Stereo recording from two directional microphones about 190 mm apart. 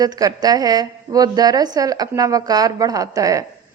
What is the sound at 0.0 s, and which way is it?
A woman's voice, 20° right (ahead or behind).